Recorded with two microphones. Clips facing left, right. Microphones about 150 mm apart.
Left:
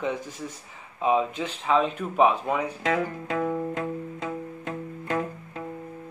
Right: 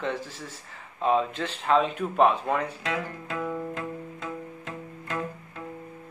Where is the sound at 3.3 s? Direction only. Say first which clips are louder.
Left 4 dB; 25° left (ahead or behind).